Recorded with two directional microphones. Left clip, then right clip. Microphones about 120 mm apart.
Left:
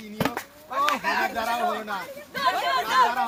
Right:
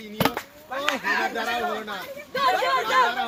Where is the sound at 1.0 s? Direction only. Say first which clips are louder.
Even; 40° left (ahead or behind).